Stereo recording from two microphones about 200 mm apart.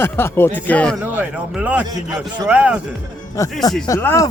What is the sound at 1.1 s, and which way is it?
A man's voice, 5° right (ahead or behind).